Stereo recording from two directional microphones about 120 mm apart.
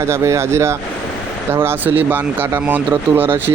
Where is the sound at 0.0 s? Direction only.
20° right (ahead or behind).